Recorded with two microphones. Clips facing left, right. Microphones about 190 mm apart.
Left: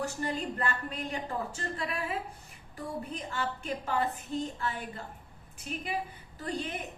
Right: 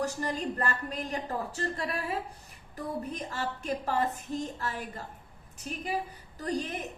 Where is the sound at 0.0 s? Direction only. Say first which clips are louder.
Right 2 dB; 40° right (ahead or behind).